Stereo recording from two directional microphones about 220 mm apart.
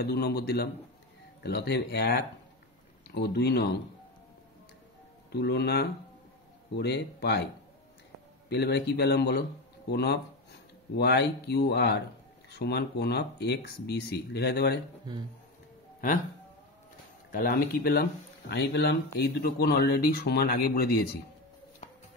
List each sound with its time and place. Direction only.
0.0 s speech: 45° left (ahead or behind)
5.3 s speech: 50° left (ahead or behind)
8.5 s speech: 50° left (ahead or behind)
17.3 s speech: 40° left (ahead or behind)